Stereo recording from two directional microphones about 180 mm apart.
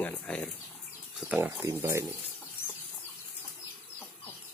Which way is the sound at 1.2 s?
5° right (ahead or behind).